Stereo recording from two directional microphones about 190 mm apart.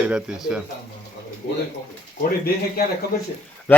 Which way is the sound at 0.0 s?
5° right (ahead or behind).